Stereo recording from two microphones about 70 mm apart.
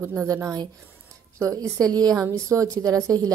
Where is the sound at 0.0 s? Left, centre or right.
Right.